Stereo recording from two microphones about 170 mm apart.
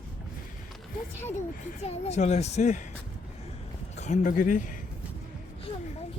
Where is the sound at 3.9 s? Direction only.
45° left (ahead or behind).